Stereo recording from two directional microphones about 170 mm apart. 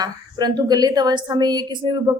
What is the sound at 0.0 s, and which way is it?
A woman's voice, 25° right (ahead or behind).